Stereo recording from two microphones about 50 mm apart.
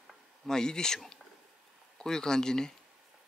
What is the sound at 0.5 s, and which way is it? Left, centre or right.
Speech, centre.